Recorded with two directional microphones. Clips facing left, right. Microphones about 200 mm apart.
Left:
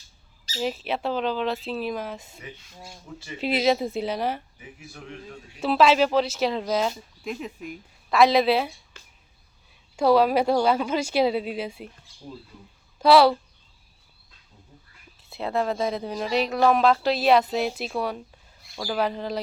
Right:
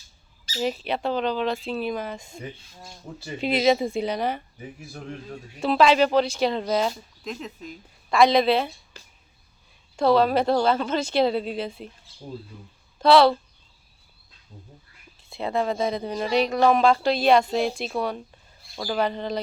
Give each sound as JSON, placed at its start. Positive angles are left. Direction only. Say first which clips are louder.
{"t": 0.6, "sound": "speech", "louder": "right 1 dB", "side_deg": 0}
{"t": 3.4, "sound": "speech", "louder": "right 2 dB", "side_deg": 5}
{"t": 4.6, "sound": "a man's voice", "louder": "right 5 dB", "side_deg": -35}
{"t": 5.5, "sound": "speech", "louder": "right 1 dB", "side_deg": 5}
{"t": 8.9, "sound": "a sound", "louder": "right 3 dB", "side_deg": -35}
{"t": 10.0, "sound": "speech", "louder": "even", "side_deg": 10}
{"t": 13.0, "sound": "speech", "louder": "even", "side_deg": 10}
{"t": 15.3, "sound": "speech", "louder": "right 1 dB", "side_deg": 0}